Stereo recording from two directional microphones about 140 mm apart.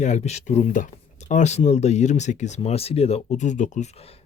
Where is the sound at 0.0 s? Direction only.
55° left (ahead or behind).